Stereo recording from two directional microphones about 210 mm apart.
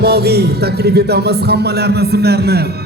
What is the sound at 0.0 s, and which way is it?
Music, 50° right (ahead or behind).